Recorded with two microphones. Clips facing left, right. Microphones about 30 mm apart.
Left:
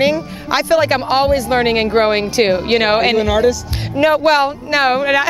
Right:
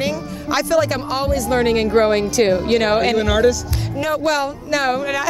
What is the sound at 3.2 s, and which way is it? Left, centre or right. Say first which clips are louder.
Speech: left 2 dB; centre.